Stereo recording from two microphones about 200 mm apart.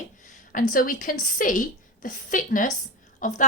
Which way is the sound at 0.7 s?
45° left (ahead or behind).